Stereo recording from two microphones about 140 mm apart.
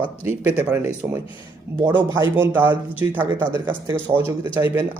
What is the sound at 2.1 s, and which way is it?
Speech, 15° right (ahead or behind).